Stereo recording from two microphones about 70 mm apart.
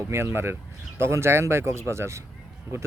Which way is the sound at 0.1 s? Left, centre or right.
Right.